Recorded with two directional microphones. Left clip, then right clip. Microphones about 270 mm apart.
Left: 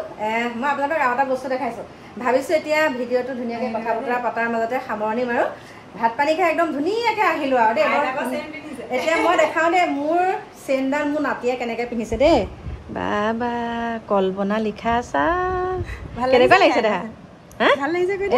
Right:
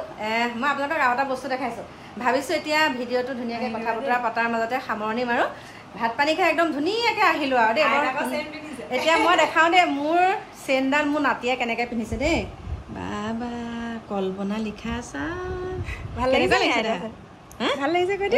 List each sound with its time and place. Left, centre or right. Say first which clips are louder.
0.2 s a woman's voice: left 1 dB; centre
17.7 s a woman's voice: left 1 dB; right